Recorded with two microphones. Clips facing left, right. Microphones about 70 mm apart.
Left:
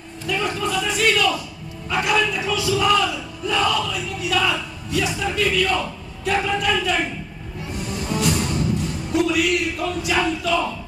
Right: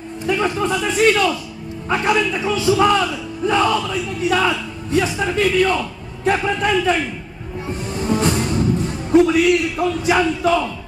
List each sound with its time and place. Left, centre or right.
0.3 s a man's voice: right
2.0 s battle cry: right
7.6 s music: right